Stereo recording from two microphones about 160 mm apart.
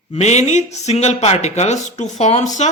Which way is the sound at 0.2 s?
45° left (ahead or behind).